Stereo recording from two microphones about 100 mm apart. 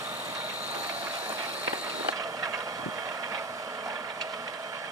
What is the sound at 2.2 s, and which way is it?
Vehicle, 35° right (ahead or behind).